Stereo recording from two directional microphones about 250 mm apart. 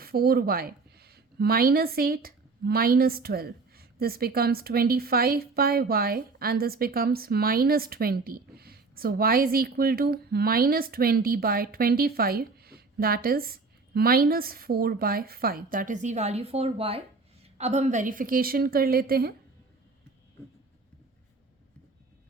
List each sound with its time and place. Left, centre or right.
0.0 s a woman's voice: right